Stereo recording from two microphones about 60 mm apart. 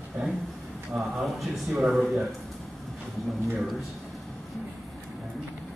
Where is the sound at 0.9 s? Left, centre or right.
Centre.